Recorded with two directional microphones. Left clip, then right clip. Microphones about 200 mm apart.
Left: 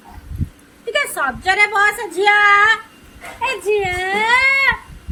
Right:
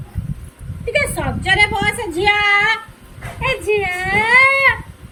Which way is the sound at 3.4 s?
35° left (ahead or behind).